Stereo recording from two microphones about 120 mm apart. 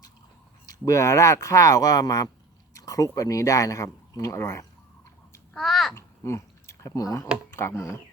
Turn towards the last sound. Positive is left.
turn(degrees=25)  # may be behind; listen again after turning